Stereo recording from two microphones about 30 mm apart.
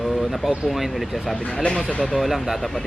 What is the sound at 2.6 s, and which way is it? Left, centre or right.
Speech, centre.